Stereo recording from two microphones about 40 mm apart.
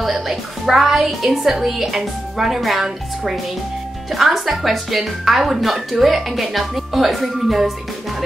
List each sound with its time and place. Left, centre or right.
0.0 s a woman's voice: centre